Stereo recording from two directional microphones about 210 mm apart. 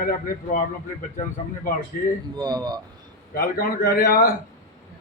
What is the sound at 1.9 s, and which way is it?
Male singing, 45° left (ahead or behind).